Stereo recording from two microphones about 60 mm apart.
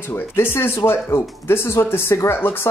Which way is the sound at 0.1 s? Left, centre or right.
Left.